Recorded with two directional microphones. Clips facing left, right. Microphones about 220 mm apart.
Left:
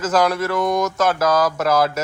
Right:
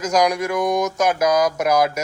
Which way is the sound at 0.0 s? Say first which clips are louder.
Even; 15° right (ahead or behind).